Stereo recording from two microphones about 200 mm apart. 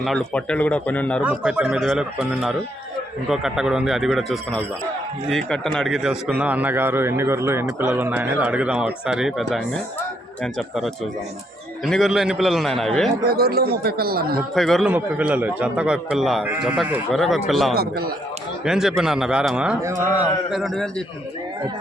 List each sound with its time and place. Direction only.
0.0 s speech: centre (ahead or behind)
1.2 s a man's voice: 5° right (ahead or behind)
13.2 s speech: 50° right (ahead or behind)
14.5 s a man's voice: centre (ahead or behind)
17.7 s speech: 50° right (ahead or behind)
18.6 s a man's voice: 5° right (ahead or behind)